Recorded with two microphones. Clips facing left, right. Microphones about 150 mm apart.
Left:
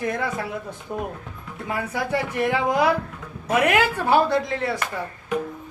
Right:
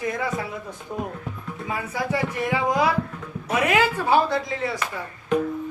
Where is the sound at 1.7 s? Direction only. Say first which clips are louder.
Left 2 dB; 60° left (ahead or behind).